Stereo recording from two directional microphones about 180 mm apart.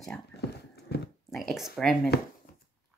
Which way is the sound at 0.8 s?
65° left (ahead or behind).